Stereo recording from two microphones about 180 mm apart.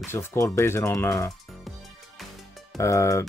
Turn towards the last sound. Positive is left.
turn(degrees=15)  # may be behind; listen again after turning